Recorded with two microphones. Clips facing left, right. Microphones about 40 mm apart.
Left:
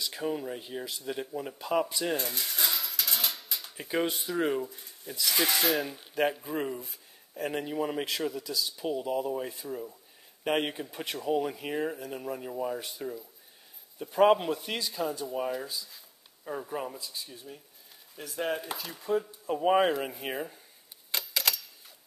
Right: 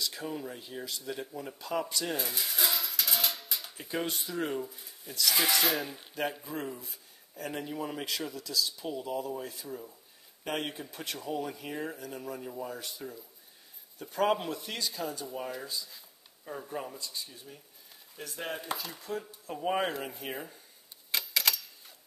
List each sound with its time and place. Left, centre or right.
0.0 s speech: centre
2.0 s dishes: centre
3.7 s speech: centre
4.6 s speech: centre
6.4 s speech: centre
21.1 s typewriter: centre